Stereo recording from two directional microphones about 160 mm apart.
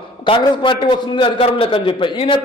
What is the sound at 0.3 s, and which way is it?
A man's voice, 30° left (ahead or behind).